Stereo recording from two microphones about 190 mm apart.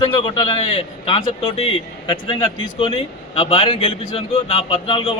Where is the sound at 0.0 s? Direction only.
25° left (ahead or behind).